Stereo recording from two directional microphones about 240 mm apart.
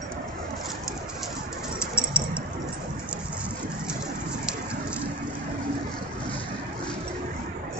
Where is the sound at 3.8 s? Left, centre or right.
Centre.